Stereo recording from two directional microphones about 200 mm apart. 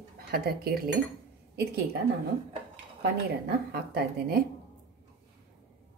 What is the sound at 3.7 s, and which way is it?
Speech, 50° right (ahead or behind).